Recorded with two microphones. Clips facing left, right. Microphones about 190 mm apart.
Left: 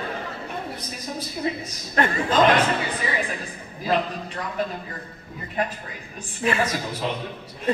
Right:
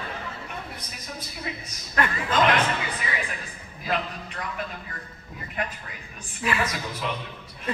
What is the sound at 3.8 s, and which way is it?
Speech, 35° left (ahead or behind).